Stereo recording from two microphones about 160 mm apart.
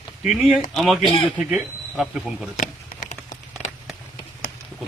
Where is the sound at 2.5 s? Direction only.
50° left (ahead or behind).